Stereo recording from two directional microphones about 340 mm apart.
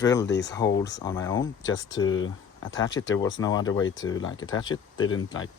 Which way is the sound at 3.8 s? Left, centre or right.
Left.